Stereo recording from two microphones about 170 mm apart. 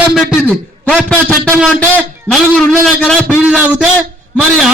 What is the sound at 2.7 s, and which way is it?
Speech, 5° left (ahead or behind).